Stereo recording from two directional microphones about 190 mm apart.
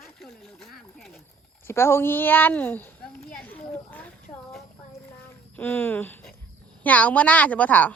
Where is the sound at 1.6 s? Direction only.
15° left (ahead or behind).